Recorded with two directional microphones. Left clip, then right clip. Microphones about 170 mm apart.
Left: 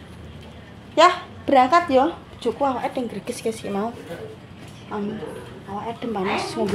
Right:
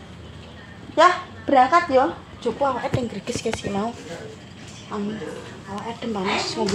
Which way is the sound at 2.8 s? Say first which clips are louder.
Even; 5° right (ahead or behind).